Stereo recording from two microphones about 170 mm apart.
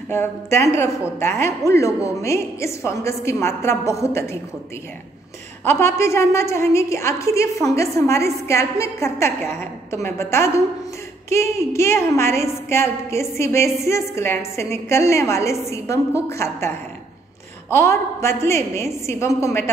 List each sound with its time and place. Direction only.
0.1 s a woman's voice: 15° left (ahead or behind)
5.7 s a woman's voice: 15° left (ahead or behind)